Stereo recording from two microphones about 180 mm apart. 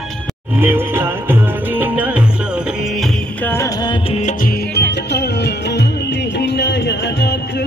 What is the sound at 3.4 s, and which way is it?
Music, 15° left (ahead or behind).